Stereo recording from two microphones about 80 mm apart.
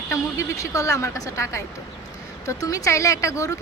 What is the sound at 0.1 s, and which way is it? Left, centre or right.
Speech, left.